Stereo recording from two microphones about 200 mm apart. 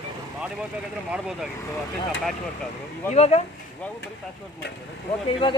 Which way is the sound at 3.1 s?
30° left (ahead or behind).